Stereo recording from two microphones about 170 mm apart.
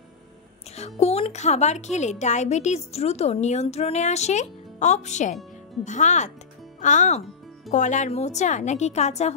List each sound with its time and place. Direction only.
0.7 s a woman's voice: 40° left (ahead or behind)